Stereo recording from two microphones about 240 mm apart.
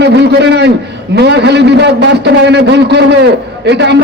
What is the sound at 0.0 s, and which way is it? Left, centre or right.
A man's voice, right.